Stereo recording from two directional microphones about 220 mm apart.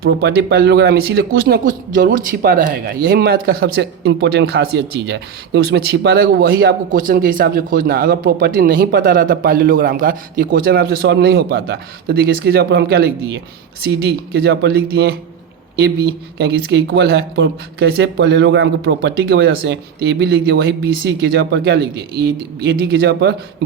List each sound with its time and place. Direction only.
0.0 s speech: 50° right (ahead or behind)